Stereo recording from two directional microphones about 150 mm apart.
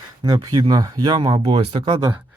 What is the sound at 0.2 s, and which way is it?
Speech, 30° right (ahead or behind).